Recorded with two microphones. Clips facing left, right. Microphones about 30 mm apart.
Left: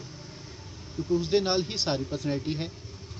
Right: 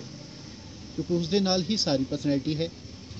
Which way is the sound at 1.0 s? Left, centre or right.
Right.